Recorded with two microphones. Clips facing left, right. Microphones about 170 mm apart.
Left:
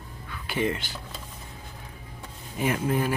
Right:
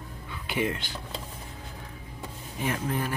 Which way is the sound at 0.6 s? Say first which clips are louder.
Left 3 dB; centre (ahead or behind).